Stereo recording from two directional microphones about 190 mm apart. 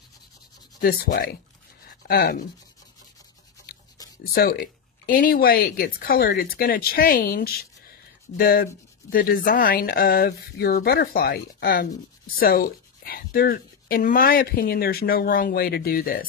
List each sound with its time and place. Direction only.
0.7 s a woman's voice: 55° left (ahead or behind)
4.3 s a woman's voice: 55° left (ahead or behind)